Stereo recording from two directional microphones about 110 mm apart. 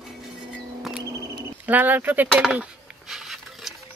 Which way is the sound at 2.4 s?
5° right (ahead or behind).